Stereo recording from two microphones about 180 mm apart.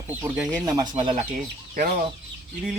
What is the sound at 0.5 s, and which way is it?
Speech, 20° right (ahead or behind).